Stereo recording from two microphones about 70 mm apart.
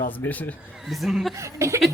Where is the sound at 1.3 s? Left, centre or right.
Right.